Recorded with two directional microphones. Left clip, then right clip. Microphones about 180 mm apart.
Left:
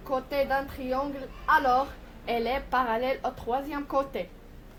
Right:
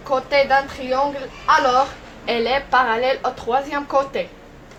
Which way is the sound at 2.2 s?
40° left (ahead or behind).